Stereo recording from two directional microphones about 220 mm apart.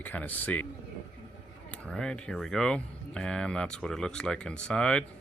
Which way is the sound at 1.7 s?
5° left (ahead or behind).